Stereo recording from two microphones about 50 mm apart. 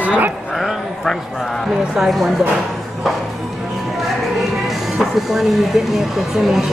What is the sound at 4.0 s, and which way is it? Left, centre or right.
Speech, centre.